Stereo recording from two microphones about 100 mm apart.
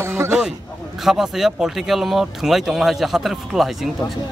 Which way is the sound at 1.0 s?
5° right (ahead or behind).